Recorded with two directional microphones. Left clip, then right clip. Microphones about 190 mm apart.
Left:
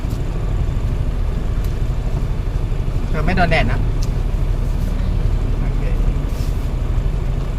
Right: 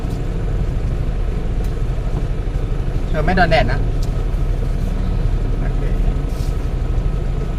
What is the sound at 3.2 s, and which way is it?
Speech, 20° right (ahead or behind).